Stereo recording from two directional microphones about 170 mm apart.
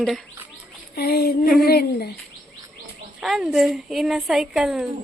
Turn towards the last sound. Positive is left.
turn(degrees=0)  # may be behind; listen again after turning